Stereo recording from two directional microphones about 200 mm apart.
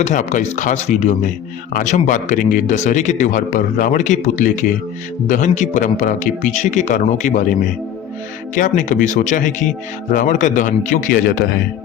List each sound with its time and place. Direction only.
0.0 s speech: 35° left (ahead or behind)